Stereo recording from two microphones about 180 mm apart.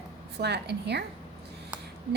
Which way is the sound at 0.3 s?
70° right (ahead or behind).